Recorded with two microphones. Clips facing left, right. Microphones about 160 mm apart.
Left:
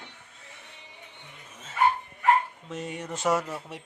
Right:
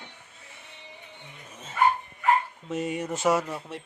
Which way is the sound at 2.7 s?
10° right (ahead or behind).